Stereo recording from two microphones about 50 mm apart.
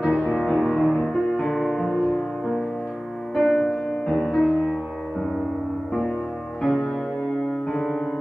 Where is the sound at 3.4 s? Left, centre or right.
Centre.